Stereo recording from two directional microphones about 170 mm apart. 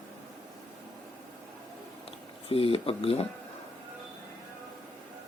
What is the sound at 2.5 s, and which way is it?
Speech, 35° left (ahead or behind).